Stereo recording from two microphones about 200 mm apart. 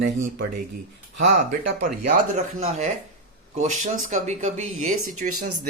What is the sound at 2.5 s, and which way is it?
Speech, 35° right (ahead or behind).